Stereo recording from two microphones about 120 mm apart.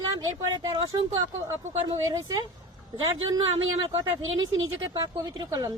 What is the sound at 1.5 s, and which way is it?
Speech, 25° right (ahead or behind).